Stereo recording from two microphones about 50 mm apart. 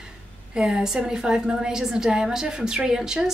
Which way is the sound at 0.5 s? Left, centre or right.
Centre.